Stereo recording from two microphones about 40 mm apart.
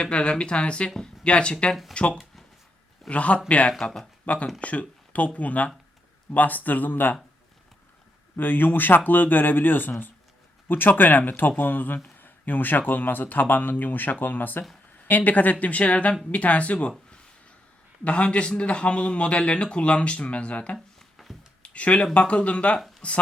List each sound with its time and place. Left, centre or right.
0.0 s speech: left
3.7 s speech: centre
4.3 s speech: left
8.4 s speech: left
18.0 s speech: left
20.7 s a sound: centre
21.6 s speech: left